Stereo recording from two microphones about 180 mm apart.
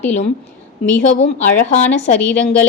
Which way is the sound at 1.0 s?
45° left (ahead or behind).